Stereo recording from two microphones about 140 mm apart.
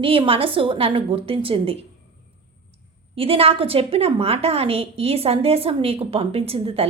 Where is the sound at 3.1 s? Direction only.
40° right (ahead or behind).